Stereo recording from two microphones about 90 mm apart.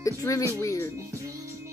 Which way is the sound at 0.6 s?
35° left (ahead or behind).